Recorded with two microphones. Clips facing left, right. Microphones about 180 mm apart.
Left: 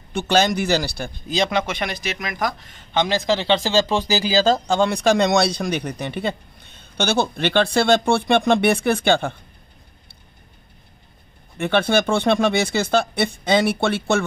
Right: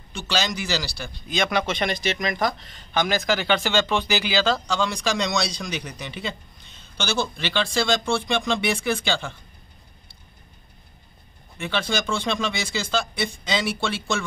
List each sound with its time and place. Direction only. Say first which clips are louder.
0.1 s speech: left 8 dB; 55° left (ahead or behind)
1.7 s speech: right 2 dB; 5° left (ahead or behind)
2.9 s speech: left 3 dB; 25° left (ahead or behind); by 9.4 s 55° left (ahead or behind)
11.5 s speech: left 8 dB; 60° left (ahead or behind)